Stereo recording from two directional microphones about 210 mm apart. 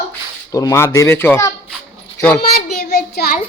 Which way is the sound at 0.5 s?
15° left (ahead or behind).